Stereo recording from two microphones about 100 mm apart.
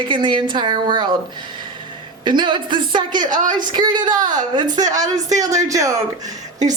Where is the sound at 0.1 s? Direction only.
50° right (ahead or behind).